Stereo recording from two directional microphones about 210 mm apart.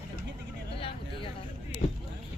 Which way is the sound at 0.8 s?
25° left (ahead or behind).